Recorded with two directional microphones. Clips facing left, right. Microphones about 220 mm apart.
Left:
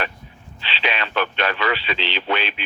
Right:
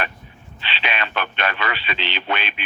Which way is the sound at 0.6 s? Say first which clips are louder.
Left 2 dB; 55° right (ahead or behind).